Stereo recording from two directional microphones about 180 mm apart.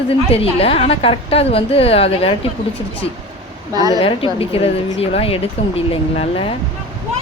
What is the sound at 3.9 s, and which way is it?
A woman's voice, 30° left (ahead or behind).